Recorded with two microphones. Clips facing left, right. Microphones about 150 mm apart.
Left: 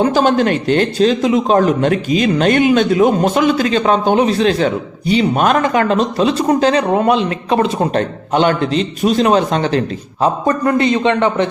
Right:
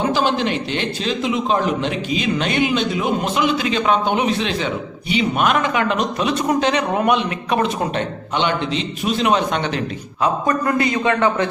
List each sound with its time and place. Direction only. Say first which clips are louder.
0.0 s a man's voice: left 6 dB; 45° left (ahead or behind); by 7.9 s 30° left (ahead or behind)
7.9 s a man's voice: left 7 dB; 45° left (ahead or behind)
10.7 s a man's voice: left 6 dB; 20° left (ahead or behind)